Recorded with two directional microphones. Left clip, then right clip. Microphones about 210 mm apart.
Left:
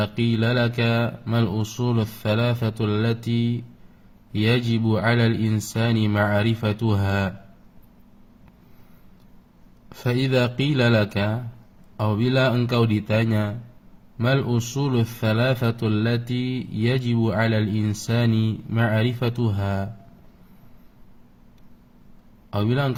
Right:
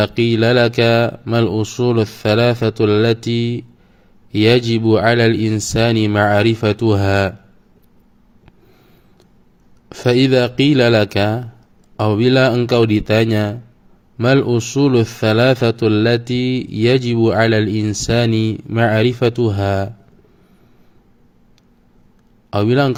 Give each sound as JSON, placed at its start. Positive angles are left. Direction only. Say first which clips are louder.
{"t": 0.0, "sound": "a man's voice", "louder": "right 10 dB", "side_deg": -35}
{"t": 9.9, "sound": "a man's voice", "louder": "right 10 dB", "side_deg": -40}
{"t": 22.4, "sound": "a man's voice", "louder": "right 10 dB", "side_deg": -35}